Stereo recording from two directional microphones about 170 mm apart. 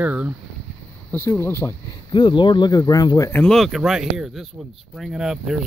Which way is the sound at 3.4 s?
Centre (ahead or behind).